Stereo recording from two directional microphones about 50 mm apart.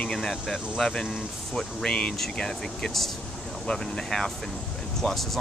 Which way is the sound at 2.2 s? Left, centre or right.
Centre.